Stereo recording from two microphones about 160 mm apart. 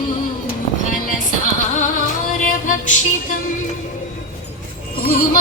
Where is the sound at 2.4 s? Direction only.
55° left (ahead or behind).